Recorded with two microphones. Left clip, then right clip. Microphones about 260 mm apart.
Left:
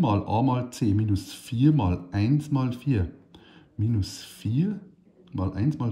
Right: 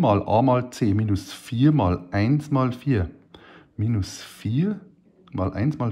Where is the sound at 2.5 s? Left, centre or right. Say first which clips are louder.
Right 6 dB; right.